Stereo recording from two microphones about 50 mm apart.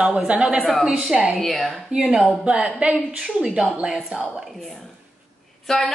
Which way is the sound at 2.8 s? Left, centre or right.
Centre.